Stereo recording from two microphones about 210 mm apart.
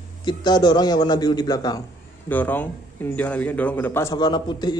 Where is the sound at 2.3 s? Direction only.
10° left (ahead or behind).